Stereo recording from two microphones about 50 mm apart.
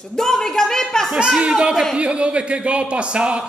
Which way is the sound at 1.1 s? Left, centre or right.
Centre.